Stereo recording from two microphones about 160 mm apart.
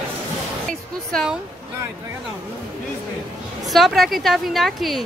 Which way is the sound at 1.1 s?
Centre (ahead or behind).